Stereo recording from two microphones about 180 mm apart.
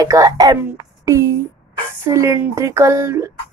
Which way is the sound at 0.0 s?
20° right (ahead or behind).